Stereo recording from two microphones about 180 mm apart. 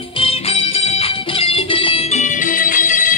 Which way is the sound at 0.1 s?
30° left (ahead or behind).